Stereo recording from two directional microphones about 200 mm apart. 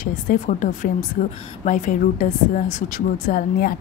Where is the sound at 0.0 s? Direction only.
40° left (ahead or behind).